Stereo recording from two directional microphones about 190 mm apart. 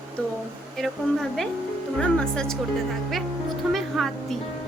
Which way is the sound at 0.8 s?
Centre (ahead or behind).